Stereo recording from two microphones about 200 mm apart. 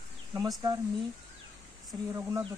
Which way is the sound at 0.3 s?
20° right (ahead or behind).